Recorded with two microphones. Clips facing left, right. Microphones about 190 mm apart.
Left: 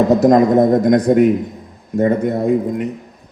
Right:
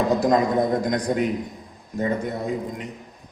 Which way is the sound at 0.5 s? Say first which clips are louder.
Left 10 dB; 45° left (ahead or behind).